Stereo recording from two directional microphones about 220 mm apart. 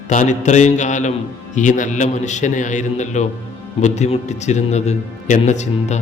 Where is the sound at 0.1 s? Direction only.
35° left (ahead or behind).